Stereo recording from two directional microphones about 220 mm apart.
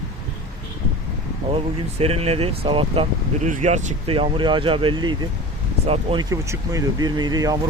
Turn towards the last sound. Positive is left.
turn(degrees=-15)  # may be behind; listen again after turning